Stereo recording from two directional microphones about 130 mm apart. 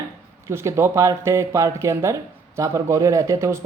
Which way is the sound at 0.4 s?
20° right (ahead or behind).